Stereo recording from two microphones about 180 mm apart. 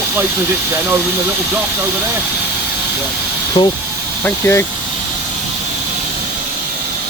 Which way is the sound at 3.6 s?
25° left (ahead or behind).